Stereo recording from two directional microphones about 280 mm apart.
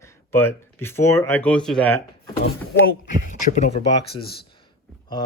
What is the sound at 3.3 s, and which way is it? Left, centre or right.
Speech, left.